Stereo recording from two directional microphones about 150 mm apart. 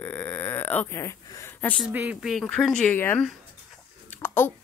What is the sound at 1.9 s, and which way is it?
Speech, 10° right (ahead or behind).